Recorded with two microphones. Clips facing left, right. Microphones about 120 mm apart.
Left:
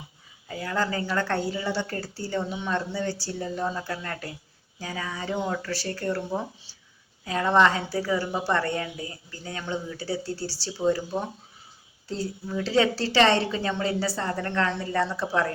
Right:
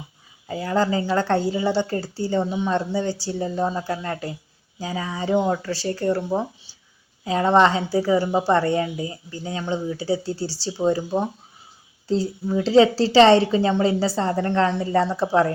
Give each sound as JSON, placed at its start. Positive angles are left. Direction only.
{"t": 0.4, "sound": "a woman's voice", "side_deg": -25}